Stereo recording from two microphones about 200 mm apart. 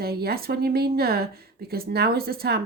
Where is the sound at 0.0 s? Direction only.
50° right (ahead or behind).